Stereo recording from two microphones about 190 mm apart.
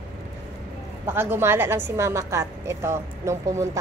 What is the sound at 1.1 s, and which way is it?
A woman's voice, 10° right (ahead or behind).